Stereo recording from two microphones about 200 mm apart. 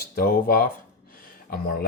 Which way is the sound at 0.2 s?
45° left (ahead or behind).